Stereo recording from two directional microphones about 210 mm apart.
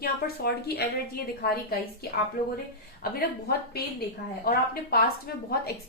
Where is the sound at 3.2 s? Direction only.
50° left (ahead or behind).